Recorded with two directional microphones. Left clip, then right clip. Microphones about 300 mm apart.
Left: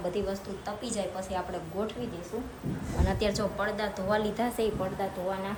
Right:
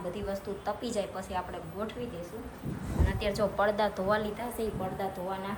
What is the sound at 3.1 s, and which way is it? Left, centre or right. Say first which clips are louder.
A woman's voice: left 1 dB; centre.